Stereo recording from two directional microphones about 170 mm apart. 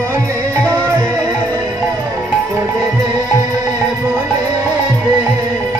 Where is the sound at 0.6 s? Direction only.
10° left (ahead or behind).